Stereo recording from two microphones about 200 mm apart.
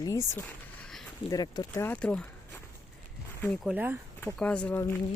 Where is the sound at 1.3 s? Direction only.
20° left (ahead or behind).